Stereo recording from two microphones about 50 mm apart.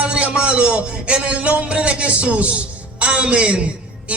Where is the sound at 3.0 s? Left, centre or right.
Right.